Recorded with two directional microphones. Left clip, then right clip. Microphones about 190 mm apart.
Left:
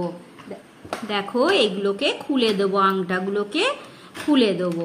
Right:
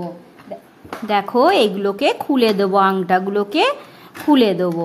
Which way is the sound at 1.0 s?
65° right (ahead or behind).